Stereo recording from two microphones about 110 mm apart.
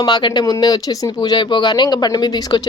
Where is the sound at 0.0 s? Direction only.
45° left (ahead or behind).